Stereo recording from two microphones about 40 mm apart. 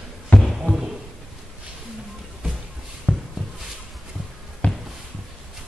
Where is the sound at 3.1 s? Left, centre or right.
Left.